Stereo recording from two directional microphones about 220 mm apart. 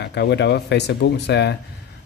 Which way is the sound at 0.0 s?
50° left (ahead or behind).